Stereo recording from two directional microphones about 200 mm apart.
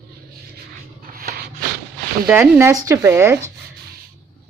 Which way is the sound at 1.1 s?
50° right (ahead or behind).